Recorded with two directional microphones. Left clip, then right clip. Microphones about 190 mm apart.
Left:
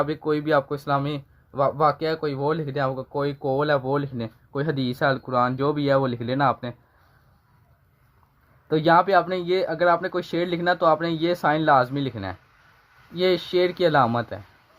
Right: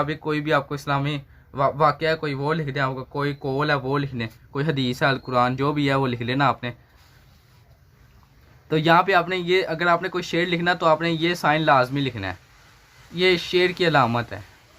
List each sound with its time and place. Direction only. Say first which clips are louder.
0.0 s speech: left 1 dB; 40° left (ahead or behind)
8.7 s speech: even; 30° left (ahead or behind)